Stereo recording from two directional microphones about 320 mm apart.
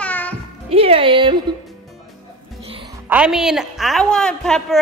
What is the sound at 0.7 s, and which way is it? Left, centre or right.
Speech, centre.